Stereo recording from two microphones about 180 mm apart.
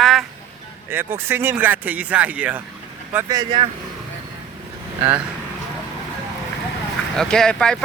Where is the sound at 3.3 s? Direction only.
30° right (ahead or behind).